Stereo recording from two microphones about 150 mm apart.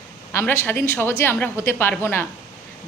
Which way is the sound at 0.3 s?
15° left (ahead or behind).